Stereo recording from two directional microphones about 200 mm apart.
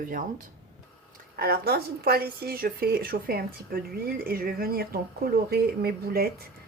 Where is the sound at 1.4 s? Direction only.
50° right (ahead or behind).